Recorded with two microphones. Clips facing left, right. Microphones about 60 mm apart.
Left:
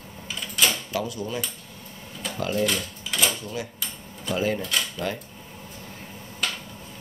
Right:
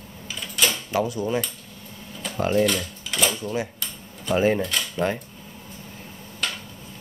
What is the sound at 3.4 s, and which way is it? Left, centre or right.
Speech, right.